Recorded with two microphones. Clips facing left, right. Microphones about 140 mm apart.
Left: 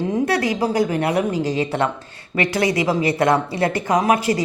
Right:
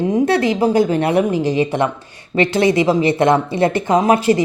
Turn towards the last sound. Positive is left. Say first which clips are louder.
# right 4 dB
turn(degrees=-30)  # may be behind; listen again after turning